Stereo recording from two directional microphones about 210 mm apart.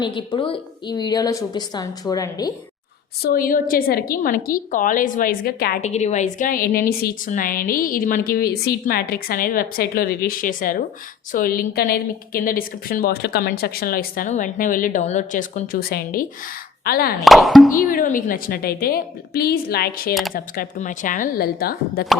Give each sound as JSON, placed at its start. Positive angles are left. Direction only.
{"t": 0.0, "sound": "a woman's voice", "side_deg": 25}
{"t": 3.2, "sound": "a woman's voice", "side_deg": 40}
{"t": 5.8, "sound": "a woman's voice", "side_deg": 35}
{"t": 17.2, "sound": "speech", "side_deg": 0}
{"t": 17.8, "sound": "a woman's voice", "side_deg": 40}